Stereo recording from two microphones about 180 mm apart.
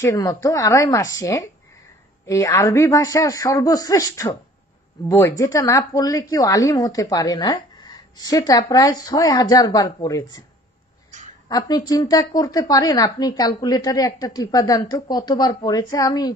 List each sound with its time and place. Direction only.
0.0 s a woman's voice: 20° left (ahead or behind)
11.4 s a woman's voice: 20° left (ahead or behind)